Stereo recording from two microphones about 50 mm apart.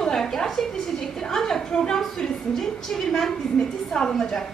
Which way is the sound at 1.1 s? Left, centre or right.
Centre.